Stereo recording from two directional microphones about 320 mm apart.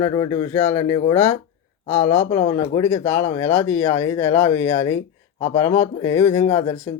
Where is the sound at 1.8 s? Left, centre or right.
Centre.